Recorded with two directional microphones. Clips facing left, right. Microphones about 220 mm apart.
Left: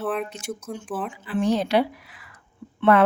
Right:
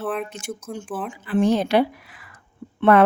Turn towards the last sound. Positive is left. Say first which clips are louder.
# right 2 dB
turn(degrees=-50)  # may be behind; listen again after turning